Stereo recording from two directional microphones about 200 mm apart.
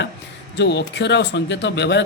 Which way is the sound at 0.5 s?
60° left (ahead or behind).